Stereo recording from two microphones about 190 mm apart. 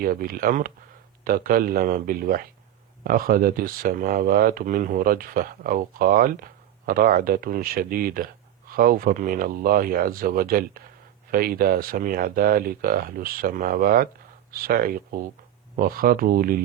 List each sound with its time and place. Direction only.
0.0 s speech: 50° right (ahead or behind)